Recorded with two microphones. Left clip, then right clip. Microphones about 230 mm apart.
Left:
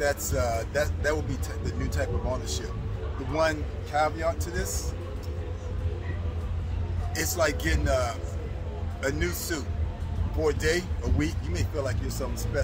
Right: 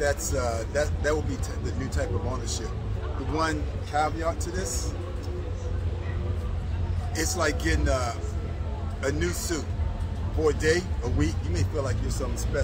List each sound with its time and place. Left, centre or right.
0.0 s speech: centre
7.2 s speech: centre